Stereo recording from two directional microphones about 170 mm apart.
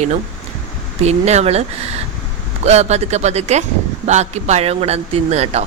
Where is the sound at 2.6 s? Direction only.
40° right (ahead or behind).